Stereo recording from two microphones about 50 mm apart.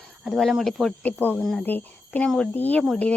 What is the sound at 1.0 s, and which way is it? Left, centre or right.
Speech, left.